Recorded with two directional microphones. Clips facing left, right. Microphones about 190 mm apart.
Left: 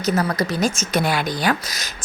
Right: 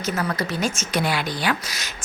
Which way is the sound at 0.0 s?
40° left (ahead or behind).